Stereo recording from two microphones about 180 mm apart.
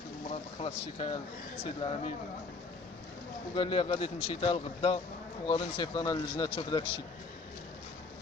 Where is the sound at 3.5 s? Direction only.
30° left (ahead or behind).